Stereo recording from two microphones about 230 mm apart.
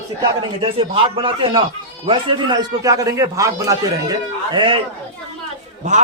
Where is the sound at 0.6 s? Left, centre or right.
Right.